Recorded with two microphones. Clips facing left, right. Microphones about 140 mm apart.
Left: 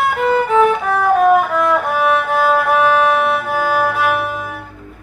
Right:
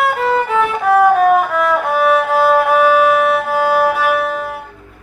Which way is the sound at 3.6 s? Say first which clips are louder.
Right 3 dB; 25° right (ahead or behind).